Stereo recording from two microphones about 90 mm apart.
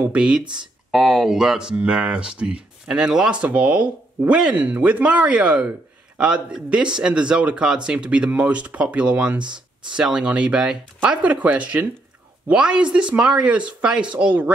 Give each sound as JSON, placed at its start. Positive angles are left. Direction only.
{"t": 0.0, "sound": "speech", "side_deg": -10}
{"t": 0.6, "sound": "speech", "side_deg": 0}